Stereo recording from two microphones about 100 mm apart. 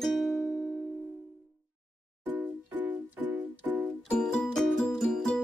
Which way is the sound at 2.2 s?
20° right (ahead or behind).